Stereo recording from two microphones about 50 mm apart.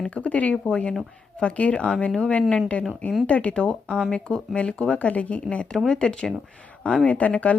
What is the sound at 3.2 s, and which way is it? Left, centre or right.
Speech, left.